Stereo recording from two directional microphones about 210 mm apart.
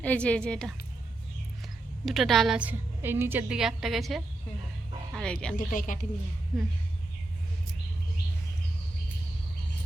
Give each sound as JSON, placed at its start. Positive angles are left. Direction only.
{"t": 0.0, "sound": "a woman's voice", "side_deg": 5}
{"t": 2.0, "sound": "a woman's voice", "side_deg": 0}
{"t": 5.5, "sound": "speech", "side_deg": 40}